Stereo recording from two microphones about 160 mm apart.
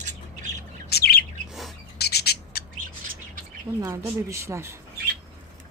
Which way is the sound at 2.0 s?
90° left.